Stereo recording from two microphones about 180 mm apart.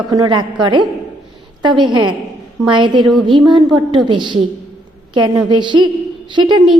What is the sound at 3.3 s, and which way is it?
A woman's voice, 25° right (ahead or behind).